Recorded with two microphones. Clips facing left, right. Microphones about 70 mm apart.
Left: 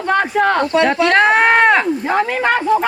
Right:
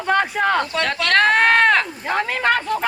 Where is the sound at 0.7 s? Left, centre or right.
Centre.